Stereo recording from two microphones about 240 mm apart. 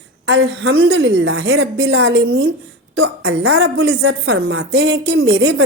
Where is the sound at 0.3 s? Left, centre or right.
Right.